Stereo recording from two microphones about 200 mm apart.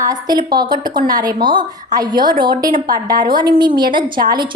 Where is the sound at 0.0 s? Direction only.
20° right (ahead or behind).